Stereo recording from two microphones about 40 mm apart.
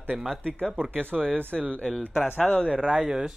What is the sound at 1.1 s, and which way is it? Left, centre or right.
Speech, centre.